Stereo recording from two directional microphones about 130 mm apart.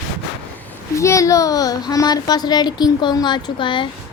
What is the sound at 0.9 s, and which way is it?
Speech, 25° left (ahead or behind).